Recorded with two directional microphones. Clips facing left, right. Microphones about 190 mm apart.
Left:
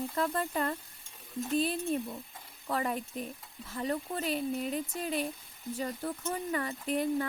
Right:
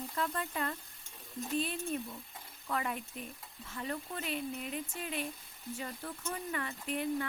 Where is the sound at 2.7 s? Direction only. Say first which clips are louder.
Left 4 dB; 35° left (ahead or behind).